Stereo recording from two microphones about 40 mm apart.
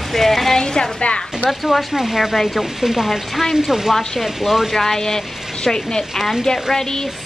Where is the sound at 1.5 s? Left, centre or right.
Centre.